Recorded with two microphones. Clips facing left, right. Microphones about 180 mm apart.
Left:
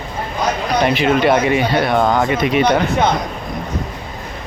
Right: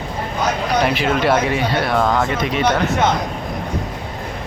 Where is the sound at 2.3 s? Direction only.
10° left (ahead or behind).